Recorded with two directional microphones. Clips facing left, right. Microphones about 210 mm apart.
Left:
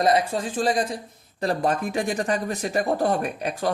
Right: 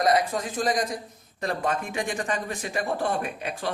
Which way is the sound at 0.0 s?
30° left (ahead or behind).